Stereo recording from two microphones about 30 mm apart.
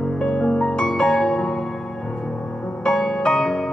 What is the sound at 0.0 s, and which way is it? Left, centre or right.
Music, centre.